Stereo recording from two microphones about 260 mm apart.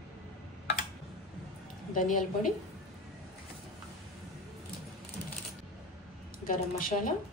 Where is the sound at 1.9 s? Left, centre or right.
Left.